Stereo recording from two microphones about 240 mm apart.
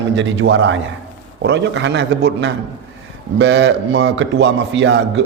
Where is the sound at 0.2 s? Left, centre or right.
Right.